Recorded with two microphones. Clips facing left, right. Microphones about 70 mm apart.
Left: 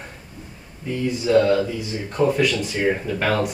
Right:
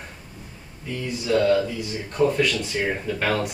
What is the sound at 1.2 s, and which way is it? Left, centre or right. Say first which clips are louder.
Speech: left 3 dB; left.